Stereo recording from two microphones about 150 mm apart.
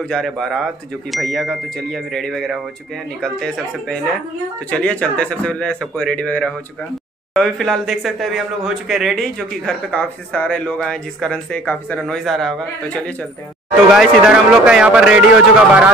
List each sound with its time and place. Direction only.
0.0 s a man's voice: 5° left (ahead or behind)
13.9 s a man's voice: 5° right (ahead or behind)